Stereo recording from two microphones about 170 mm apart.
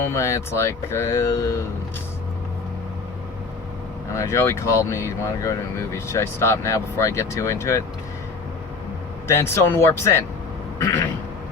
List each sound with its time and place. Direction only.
0.0 s speech: 15° left (ahead or behind)
4.1 s speech: 15° left (ahead or behind)
9.2 s speech: 15° left (ahead or behind)